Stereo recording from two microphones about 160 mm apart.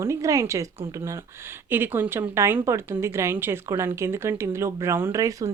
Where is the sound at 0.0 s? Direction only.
20° right (ahead or behind).